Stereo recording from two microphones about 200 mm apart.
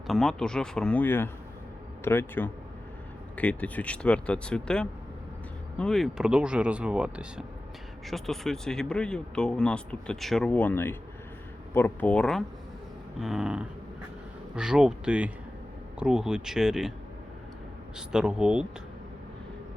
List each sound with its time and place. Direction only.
0.1 s speech: centre (ahead or behind)
17.9 s speech: 5° right (ahead or behind)